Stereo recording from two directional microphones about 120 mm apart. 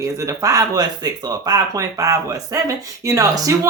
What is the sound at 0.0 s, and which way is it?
Speech, 25° right (ahead or behind).